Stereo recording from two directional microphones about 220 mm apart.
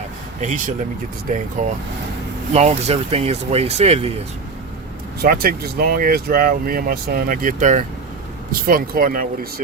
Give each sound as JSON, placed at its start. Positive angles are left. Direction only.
{"t": 0.4, "sound": "speech", "side_deg": -35}
{"t": 2.5, "sound": "speech", "side_deg": -30}
{"t": 5.2, "sound": "speech", "side_deg": -40}